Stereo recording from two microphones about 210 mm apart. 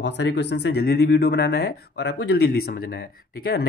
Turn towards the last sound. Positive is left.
turn(degrees=50)  # may be behind; listen again after turning